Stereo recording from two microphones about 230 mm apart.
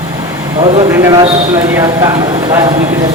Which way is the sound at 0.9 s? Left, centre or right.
Centre.